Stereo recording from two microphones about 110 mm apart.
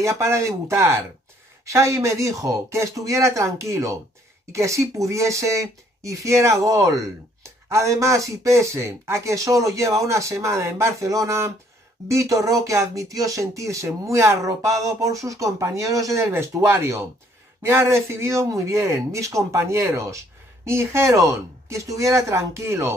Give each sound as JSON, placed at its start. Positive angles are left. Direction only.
{"t": 0.0, "sound": "speech", "side_deg": -25}